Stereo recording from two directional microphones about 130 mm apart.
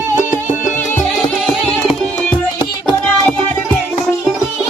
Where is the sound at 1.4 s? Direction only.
Centre (ahead or behind).